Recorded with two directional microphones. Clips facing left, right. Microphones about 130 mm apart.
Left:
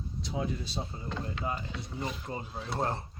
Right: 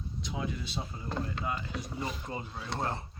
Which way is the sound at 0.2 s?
35° left (ahead or behind).